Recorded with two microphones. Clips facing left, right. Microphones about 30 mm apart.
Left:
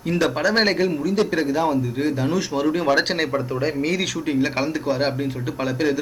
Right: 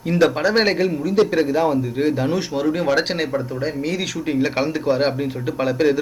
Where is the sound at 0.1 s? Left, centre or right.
Centre.